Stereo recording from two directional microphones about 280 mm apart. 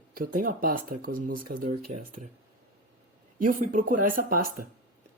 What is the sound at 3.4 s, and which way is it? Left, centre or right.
A woman's voice, right.